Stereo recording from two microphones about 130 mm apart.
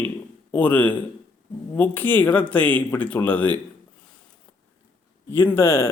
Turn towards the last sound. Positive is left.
turn(degrees=20)  # may be behind; listen again after turning